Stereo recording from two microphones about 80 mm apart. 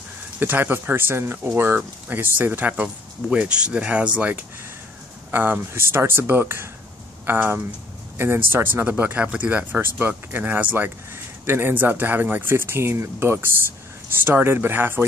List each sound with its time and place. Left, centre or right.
0.4 s speech: right